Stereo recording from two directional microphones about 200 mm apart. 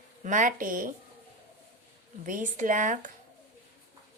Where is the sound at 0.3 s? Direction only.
40° right (ahead or behind).